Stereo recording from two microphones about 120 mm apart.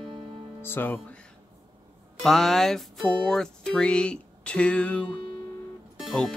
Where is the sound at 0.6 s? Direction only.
20° left (ahead or behind).